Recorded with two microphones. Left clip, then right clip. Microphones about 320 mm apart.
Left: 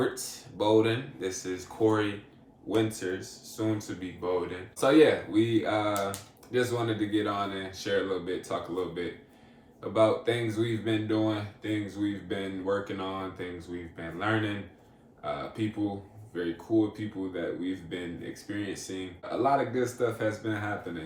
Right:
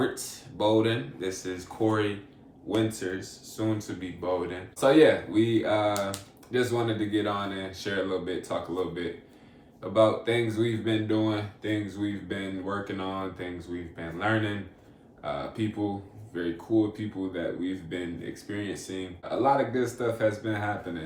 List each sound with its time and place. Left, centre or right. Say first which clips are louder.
0.0 s speech: right 1 dB; centre